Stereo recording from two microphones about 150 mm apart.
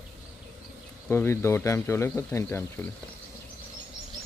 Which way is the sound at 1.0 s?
15° left (ahead or behind).